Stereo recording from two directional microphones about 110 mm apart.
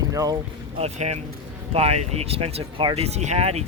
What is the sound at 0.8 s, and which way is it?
Speech, 90° right.